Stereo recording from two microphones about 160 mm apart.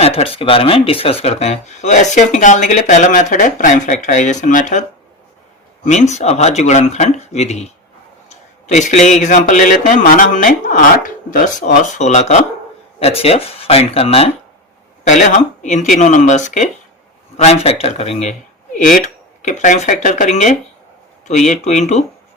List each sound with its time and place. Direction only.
0.0 s speech: 40° left (ahead or behind)
15.0 s speech: 50° left (ahead or behind)
18.8 s speech: 55° left (ahead or behind)